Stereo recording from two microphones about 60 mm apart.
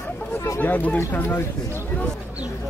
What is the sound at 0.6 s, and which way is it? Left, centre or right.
Speech, left.